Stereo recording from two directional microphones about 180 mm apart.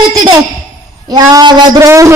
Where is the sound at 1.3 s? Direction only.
20° right (ahead or behind).